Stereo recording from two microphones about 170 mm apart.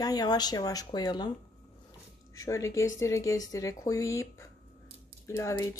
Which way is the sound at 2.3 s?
20° left (ahead or behind).